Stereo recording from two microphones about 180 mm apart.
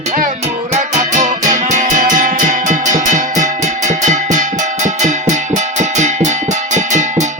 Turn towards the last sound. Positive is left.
turn(degrees=-40)  # may be behind; listen again after turning